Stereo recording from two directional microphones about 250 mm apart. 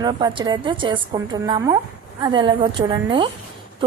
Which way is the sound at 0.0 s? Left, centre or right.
Centre.